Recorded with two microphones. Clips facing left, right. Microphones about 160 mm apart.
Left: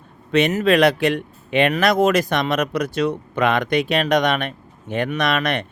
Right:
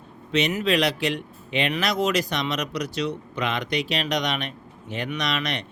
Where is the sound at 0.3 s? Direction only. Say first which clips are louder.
Left 6 dB; 55° left (ahead or behind).